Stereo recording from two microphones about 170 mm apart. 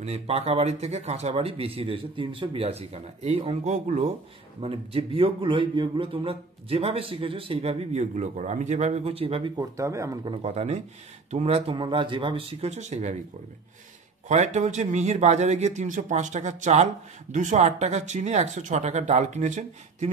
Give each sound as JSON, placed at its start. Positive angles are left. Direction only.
{"t": 0.0, "sound": "a man's voice", "side_deg": -40}
{"t": 9.6, "sound": "speech", "side_deg": -20}
{"t": 10.3, "sound": "a man's voice", "side_deg": -40}
{"t": 14.2, "sound": "speech", "side_deg": -45}